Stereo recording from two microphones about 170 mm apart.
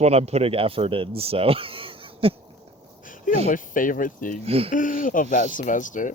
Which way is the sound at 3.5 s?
50° left (ahead or behind).